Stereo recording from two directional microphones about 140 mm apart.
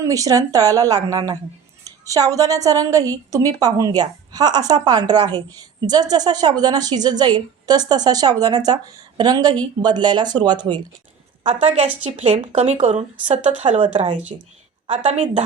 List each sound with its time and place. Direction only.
0.0 s a woman's voice: 25° right (ahead or behind)
11.4 s speech: 50° right (ahead or behind)
14.3 s speech: 35° right (ahead or behind)
14.8 s speech: 55° right (ahead or behind)